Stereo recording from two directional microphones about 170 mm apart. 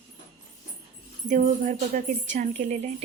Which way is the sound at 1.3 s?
50° right (ahead or behind).